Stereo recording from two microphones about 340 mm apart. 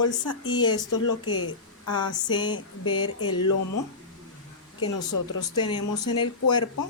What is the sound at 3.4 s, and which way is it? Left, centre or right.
Speech, left.